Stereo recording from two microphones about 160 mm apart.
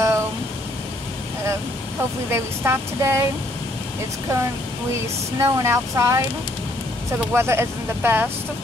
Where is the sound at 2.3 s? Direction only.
15° right (ahead or behind).